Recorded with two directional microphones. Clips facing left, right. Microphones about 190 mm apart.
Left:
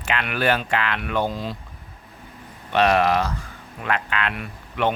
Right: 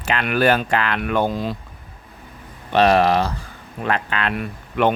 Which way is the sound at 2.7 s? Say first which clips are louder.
Right 3 dB; 35° right (ahead or behind).